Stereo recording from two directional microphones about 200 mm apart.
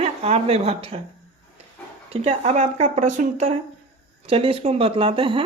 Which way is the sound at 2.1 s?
30° right (ahead or behind).